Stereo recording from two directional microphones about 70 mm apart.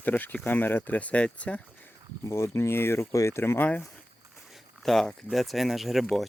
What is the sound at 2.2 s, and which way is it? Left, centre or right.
Speech, left.